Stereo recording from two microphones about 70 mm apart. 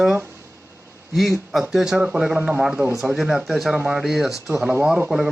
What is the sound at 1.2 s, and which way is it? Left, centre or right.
A man's voice, centre.